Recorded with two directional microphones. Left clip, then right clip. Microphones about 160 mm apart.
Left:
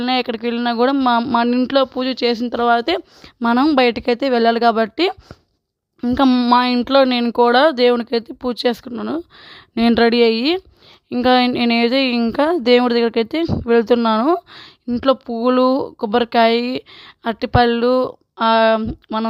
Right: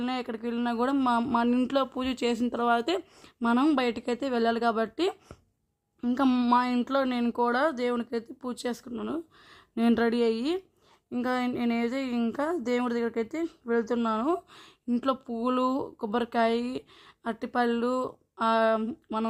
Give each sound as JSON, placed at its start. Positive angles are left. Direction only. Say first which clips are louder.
{"t": 0.0, "sound": "a woman's voice", "louder": "left 13 dB", "side_deg": 40}